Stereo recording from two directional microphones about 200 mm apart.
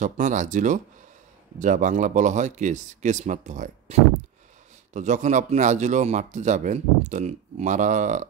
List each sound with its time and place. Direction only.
0.0 s speech: 40° right (ahead or behind)